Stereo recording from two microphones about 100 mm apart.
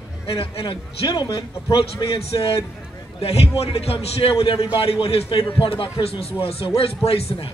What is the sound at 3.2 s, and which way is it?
A man's voice, 90° left.